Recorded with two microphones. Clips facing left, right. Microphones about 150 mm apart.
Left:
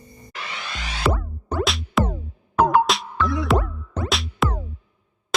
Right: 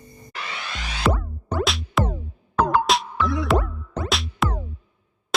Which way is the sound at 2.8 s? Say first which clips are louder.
Right 1 dB; centre (ahead or behind).